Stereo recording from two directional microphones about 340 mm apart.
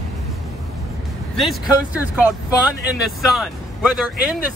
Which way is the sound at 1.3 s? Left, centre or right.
Centre.